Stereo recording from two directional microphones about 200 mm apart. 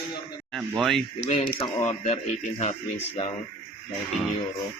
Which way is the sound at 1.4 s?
25° left (ahead or behind).